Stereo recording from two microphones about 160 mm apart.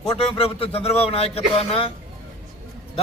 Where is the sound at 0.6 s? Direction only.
40° left (ahead or behind).